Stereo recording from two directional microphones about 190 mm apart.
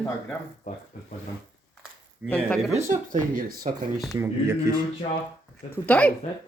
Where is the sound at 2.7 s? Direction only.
40° right (ahead or behind).